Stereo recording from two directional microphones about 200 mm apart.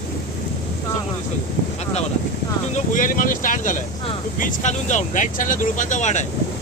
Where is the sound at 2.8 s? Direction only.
40° left (ahead or behind).